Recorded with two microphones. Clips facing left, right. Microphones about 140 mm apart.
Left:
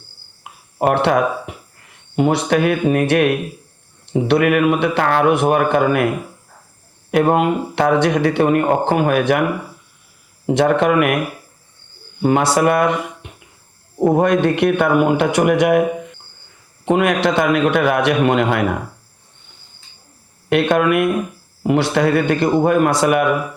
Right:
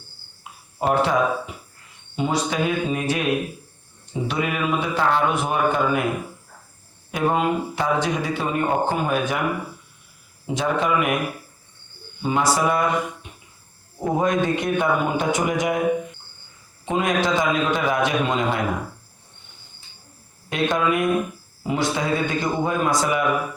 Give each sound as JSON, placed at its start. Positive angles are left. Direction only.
{"t": 0.8, "sound": "speech", "side_deg": 65}
{"t": 7.1, "sound": "speech", "side_deg": 65}
{"t": 10.4, "sound": "a man's voice", "side_deg": 65}
{"t": 12.2, "sound": "a man's voice", "side_deg": 65}
{"t": 16.8, "sound": "a man's voice", "side_deg": 65}
{"t": 20.5, "sound": "a man's voice", "side_deg": 65}